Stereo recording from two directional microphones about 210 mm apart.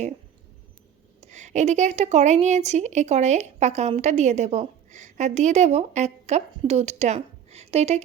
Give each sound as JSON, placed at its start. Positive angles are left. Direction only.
{"t": 1.2, "sound": "a woman's voice", "side_deg": -35}